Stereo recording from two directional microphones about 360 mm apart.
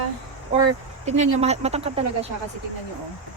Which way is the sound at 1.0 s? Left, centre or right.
Centre.